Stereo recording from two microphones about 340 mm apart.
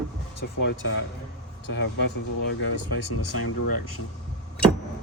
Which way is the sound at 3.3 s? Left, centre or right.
Left.